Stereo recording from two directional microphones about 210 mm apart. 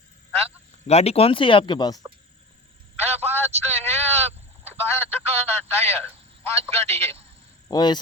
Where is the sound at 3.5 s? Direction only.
30° right (ahead or behind).